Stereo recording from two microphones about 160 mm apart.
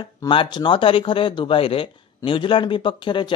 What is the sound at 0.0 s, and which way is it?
Speech, 30° left (ahead or behind).